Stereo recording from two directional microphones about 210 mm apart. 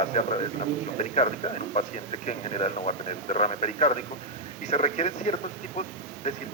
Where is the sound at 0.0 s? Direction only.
30° left (ahead or behind).